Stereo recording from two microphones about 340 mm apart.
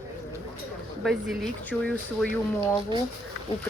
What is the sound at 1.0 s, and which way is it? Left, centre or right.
Speech, centre.